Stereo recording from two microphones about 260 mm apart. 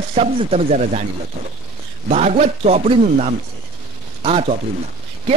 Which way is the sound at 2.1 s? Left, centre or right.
Right.